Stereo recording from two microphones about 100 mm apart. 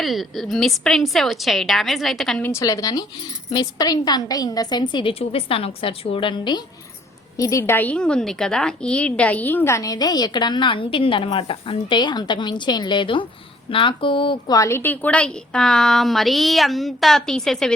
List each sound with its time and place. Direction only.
0.0 s a woman's voice: centre (ahead or behind)
2.4 s a woman's voice: 30° left (ahead or behind); by 5.1 s 50° left (ahead or behind)
5.2 s a woman's voice: 70° left (ahead or behind); by 6.6 s 50° left (ahead or behind)
7.3 s a woman's voice: 35° left (ahead or behind)
7.8 s a woman's voice: 10° left (ahead or behind); by 14.5 s 55° left (ahead or behind)
14.5 s a woman's voice: 35° left (ahead or behind)
14.8 s a woman's voice: 15° left (ahead or behind)